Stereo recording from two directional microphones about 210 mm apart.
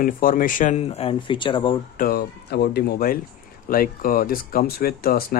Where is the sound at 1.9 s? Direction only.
45° left (ahead or behind).